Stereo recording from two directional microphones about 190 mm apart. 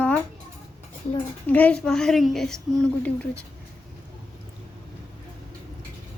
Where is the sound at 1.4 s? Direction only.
10° left (ahead or behind).